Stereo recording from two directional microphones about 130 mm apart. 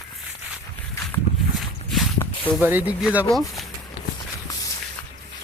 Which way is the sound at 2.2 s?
20° left (ahead or behind).